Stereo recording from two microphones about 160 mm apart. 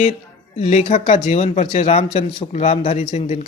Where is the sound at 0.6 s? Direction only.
40° left (ahead or behind).